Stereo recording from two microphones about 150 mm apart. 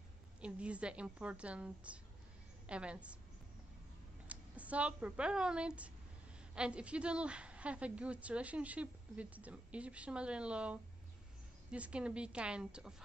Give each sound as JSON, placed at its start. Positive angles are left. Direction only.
{"t": 0.4, "sound": "a woman's voice", "side_deg": -10}
{"t": 4.3, "sound": "a woman's voice", "side_deg": -10}